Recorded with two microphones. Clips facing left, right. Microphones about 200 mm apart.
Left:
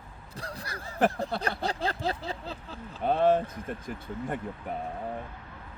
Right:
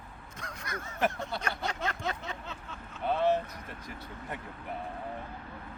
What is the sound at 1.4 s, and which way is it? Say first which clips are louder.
Speech: left 4 dB; 35° left (ahead or behind).